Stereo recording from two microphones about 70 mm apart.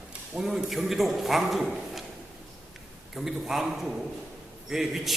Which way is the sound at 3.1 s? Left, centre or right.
Centre.